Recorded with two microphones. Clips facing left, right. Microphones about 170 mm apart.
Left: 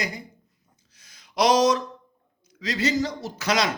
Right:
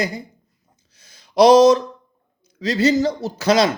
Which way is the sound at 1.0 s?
30° right (ahead or behind).